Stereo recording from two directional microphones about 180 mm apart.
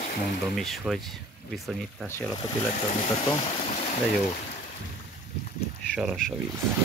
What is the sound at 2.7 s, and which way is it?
Speech, 40° left (ahead or behind).